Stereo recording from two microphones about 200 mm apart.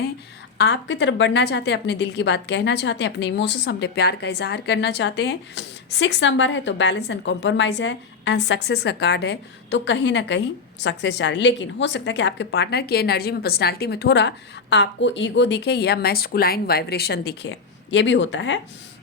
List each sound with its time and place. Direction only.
0.6 s a woman's voice: 65° left (ahead or behind)